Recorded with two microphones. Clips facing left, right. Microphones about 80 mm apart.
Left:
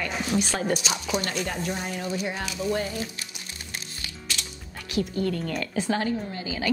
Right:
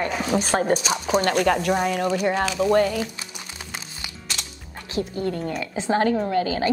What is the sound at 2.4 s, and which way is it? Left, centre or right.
Speech, right.